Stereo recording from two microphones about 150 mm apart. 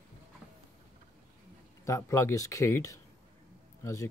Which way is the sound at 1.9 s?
20° left (ahead or behind).